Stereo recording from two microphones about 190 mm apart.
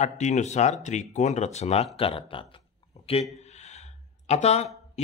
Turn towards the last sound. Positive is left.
turn(degrees=35)  # may be behind; listen again after turning